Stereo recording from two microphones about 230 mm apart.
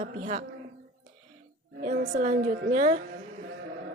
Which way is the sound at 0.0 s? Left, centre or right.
Right.